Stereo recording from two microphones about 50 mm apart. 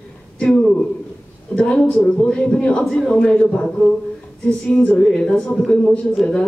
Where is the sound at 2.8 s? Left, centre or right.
Centre; by 3.9 s left.